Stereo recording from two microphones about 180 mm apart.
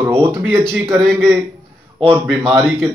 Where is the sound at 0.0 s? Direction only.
15° right (ahead or behind).